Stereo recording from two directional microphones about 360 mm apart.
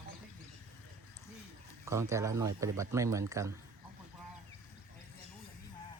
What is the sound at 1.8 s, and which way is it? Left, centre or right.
Speech, centre.